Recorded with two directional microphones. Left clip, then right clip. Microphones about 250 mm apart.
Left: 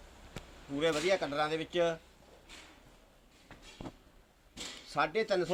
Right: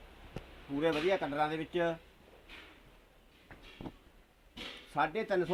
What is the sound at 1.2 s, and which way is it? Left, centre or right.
Speech, centre.